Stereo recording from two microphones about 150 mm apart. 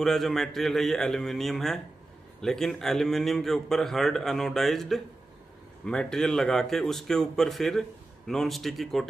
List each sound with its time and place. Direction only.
0.0 s a man's voice: centre (ahead or behind)